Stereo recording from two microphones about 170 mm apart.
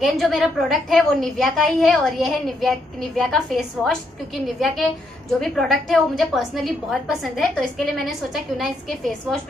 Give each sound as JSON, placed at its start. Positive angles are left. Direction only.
{"t": 0.0, "sound": "a woman's voice", "side_deg": 0}